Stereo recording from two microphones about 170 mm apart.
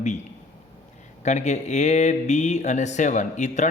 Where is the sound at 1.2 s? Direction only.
40° left (ahead or behind).